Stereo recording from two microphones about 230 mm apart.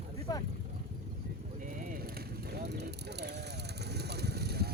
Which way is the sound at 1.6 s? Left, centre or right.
Right.